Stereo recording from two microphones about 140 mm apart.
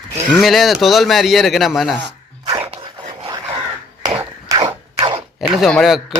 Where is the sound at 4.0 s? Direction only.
25° right (ahead or behind).